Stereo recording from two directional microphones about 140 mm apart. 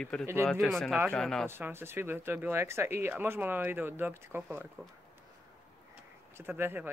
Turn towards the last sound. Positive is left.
turn(degrees=-15)  # may be behind; listen again after turning